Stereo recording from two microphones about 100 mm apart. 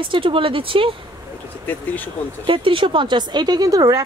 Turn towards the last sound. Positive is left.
turn(degrees=-40)  # may be behind; listen again after turning